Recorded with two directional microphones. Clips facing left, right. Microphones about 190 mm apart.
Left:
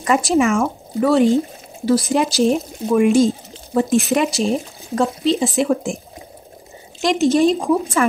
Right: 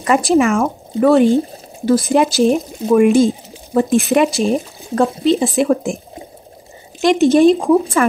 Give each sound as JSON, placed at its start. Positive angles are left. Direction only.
{"t": 0.0, "sound": "speech", "side_deg": -55}
{"t": 7.0, "sound": "speech", "side_deg": -55}